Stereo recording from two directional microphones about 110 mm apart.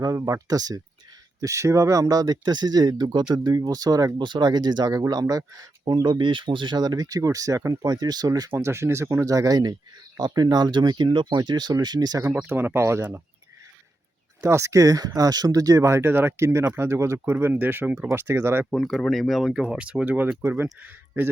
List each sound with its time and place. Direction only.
0.2 s speech: 30° right (ahead or behind)
12.5 s speech: 20° right (ahead or behind)
14.4 s speech: 25° right (ahead or behind)
18.7 s speech: centre (ahead or behind); by 20.7 s 20° right (ahead or behind)